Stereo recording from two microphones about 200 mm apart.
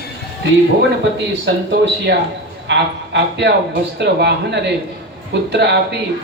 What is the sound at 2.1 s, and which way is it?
A man's voice, 60° right (ahead or behind).